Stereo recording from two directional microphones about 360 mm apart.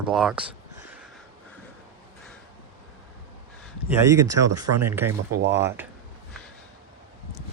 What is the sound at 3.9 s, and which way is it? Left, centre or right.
Speech, centre.